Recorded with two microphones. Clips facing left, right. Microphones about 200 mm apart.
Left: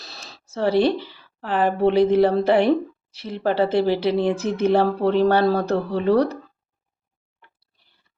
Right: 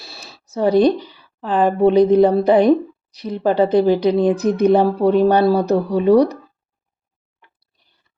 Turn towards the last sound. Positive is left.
turn(degrees=-15)  # may be behind; listen again after turning